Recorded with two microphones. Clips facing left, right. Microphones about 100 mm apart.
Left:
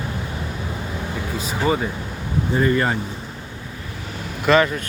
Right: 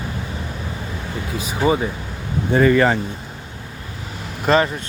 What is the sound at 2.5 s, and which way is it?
Speech, 90° right.